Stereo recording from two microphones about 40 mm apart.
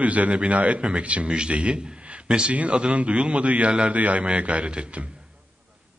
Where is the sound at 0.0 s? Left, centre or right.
Right.